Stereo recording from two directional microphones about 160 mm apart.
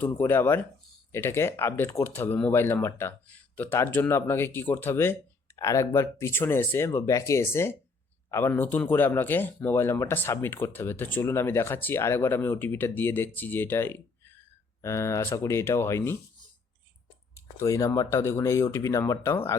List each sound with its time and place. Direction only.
0.0 s speech: 10° left (ahead or behind)
17.3 s speech: 20° left (ahead or behind)